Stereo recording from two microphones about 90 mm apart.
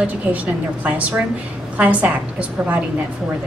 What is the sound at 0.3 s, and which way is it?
A woman's voice, 15° right (ahead or behind).